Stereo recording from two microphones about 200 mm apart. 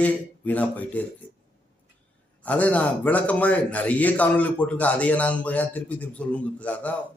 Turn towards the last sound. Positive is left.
turn(degrees=5)  # may be behind; listen again after turning